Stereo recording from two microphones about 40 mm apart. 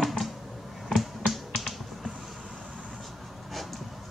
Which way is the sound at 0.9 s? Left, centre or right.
Centre.